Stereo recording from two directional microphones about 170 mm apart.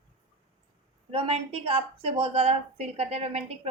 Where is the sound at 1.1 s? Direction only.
35° right (ahead or behind).